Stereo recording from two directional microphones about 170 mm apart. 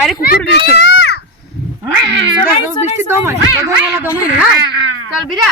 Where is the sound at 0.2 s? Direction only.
65° left (ahead or behind).